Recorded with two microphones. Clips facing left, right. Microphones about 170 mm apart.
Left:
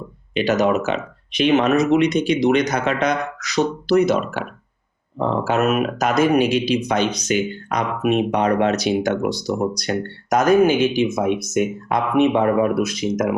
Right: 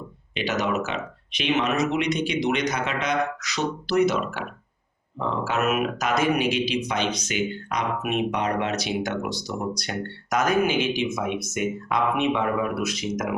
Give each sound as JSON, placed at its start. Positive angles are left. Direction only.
{"t": 0.3, "sound": "speech", "side_deg": 40}